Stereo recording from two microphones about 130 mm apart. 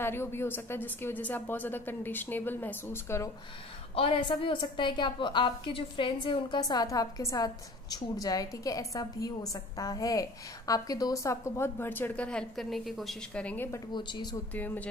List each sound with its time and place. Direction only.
0.0 s a woman's voice: 20° left (ahead or behind)
3.9 s a woman's voice: 45° left (ahead or behind); by 13.7 s 10° left (ahead or behind)
13.9 s a woman's voice: 35° left (ahead or behind)
14.5 s a woman's voice: 15° left (ahead or behind)